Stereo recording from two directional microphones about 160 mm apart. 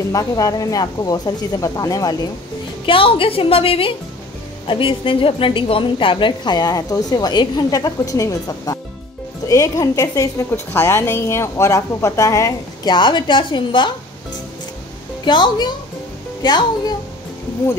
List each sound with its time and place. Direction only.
0.1 s a woman's voice: 20° left (ahead or behind)
2.9 s a woman's voice: 35° left (ahead or behind)
15.2 s a woman's voice: 30° left (ahead or behind)